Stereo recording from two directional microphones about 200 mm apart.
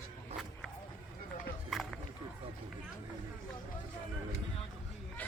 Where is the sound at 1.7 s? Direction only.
Centre (ahead or behind).